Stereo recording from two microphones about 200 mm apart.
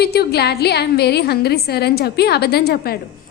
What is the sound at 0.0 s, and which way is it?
A woman's voice, 55° left (ahead or behind).